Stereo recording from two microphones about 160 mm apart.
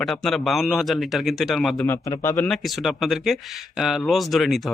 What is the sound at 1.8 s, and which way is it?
Speech, 20° left (ahead or behind).